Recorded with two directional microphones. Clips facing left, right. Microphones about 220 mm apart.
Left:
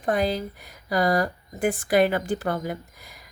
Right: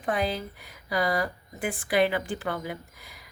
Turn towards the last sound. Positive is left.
turn(degrees=45)  # may be behind; listen again after turning